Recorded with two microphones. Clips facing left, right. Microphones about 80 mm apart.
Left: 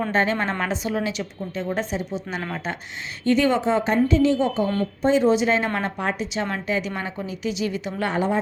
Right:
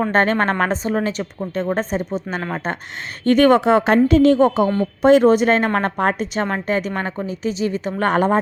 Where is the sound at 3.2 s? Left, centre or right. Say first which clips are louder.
Right 6 dB; right.